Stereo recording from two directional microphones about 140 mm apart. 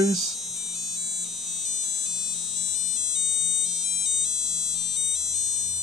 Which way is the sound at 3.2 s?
Centre (ahead or behind).